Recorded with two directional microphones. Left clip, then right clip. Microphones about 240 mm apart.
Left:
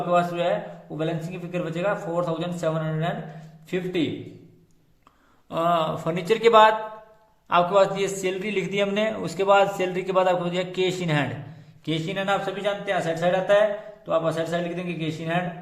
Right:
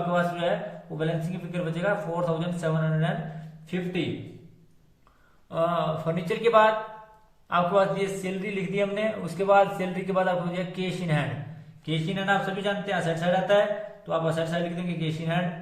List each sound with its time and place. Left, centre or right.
0.1 s a man's voice: left
5.5 s a man's voice: left